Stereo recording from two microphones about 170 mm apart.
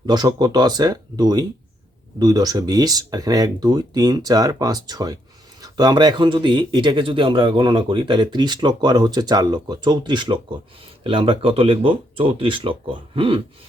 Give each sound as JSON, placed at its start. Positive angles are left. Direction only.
{"t": 0.0, "sound": "speech", "side_deg": -25}